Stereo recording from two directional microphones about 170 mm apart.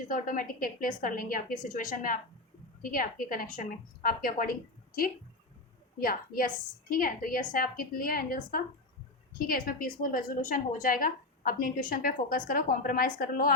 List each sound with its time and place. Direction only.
0.1 s a woman's voice: 55° left (ahead or behind)
6.0 s a woman's voice: 55° left (ahead or behind)